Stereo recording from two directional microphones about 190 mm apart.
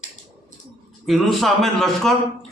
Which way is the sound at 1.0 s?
Centre (ahead or behind).